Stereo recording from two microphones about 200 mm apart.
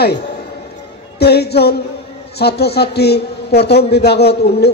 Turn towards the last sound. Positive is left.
turn(degrees=55)  # may be behind; listen again after turning